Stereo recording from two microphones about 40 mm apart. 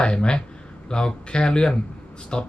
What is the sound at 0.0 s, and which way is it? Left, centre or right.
Speech, left.